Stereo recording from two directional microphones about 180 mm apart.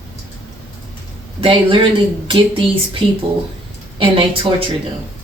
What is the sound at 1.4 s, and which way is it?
A woman's voice, 25° right (ahead or behind).